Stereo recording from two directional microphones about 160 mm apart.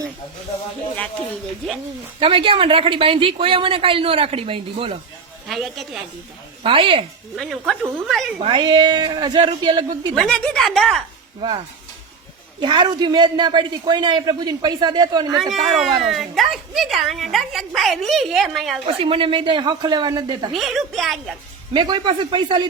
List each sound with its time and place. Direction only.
2.1 s speech: 35° right (ahead or behind)
5.5 s a woman's voice: centre (ahead or behind)
6.6 s speech: 30° right (ahead or behind)
7.3 s a woman's voice: centre (ahead or behind)
8.4 s a man's voice: 30° right (ahead or behind)
10.2 s a woman's voice: 5° left (ahead or behind)
11.3 s a man's voice: 30° right (ahead or behind)
15.4 s a woman's voice: centre (ahead or behind)
18.9 s speech: 35° right (ahead or behind)
20.5 s a woman's voice: centre (ahead or behind)
21.7 s a man's voice: 30° right (ahead or behind)